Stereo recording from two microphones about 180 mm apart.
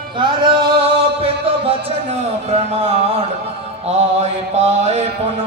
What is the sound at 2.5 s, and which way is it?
Mantra, 35° right (ahead or behind).